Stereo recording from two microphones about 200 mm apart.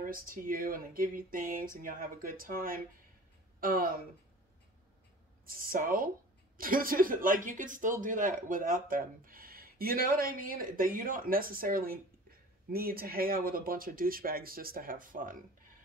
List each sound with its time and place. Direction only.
0.0 s speech: 45° right (ahead or behind)
5.4 s speech: 45° right (ahead or behind)